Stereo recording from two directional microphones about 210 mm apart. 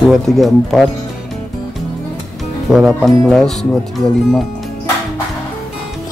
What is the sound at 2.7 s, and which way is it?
Speech, centre (ahead or behind).